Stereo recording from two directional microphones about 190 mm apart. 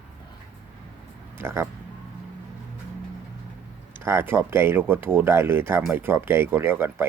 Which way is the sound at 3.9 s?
15° right (ahead or behind).